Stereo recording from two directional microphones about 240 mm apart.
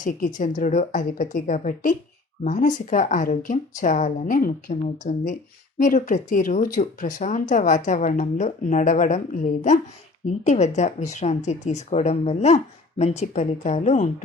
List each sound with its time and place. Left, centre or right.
0.0 s speech: left